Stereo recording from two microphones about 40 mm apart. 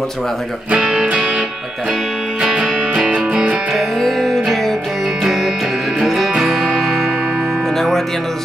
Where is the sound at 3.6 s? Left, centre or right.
Centre.